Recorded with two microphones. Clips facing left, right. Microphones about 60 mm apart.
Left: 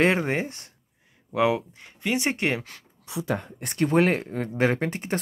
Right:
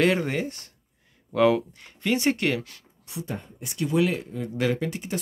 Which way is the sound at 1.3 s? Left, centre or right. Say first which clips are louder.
Right 2 dB; centre.